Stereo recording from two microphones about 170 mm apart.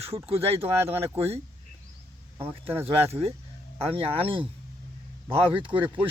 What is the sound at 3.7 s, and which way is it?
Speech, 35° right (ahead or behind).